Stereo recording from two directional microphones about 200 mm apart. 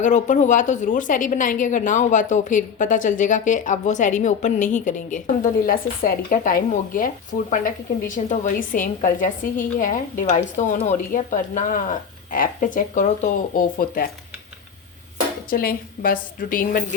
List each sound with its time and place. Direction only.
0.0 s a woman's voice: 40° left (ahead or behind)
15.4 s a woman's voice: 45° left (ahead or behind)